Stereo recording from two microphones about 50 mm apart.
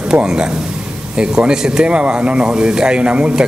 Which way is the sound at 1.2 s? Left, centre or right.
Centre.